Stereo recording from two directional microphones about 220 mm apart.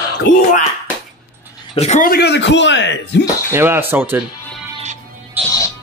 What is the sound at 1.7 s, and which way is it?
Speech, 30° left (ahead or behind).